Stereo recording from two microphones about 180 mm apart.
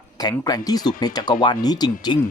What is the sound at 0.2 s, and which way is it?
Speech, 20° left (ahead or behind).